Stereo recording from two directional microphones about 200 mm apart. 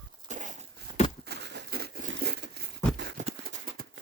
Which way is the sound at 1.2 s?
55° right (ahead or behind).